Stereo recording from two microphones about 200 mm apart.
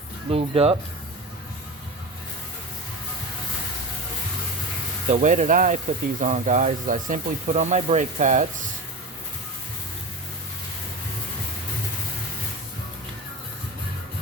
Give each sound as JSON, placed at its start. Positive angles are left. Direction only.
{"t": 0.3, "sound": "speech", "side_deg": -30}
{"t": 5.1, "sound": "speech", "side_deg": -40}